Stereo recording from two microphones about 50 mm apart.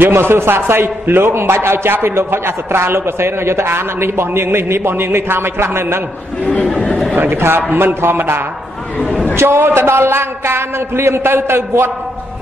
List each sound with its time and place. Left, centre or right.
0.1 s a man's voice: right
6.6 s speech: centre
7.2 s a man's voice: right
8.9 s a woman's voice: left
9.3 s a man's voice: right